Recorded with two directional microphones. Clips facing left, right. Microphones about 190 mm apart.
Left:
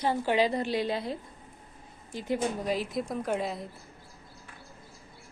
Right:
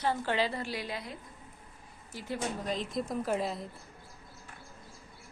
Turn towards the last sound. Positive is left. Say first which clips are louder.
# left 1 dB
turn(degrees=0)  # may be behind; listen again after turning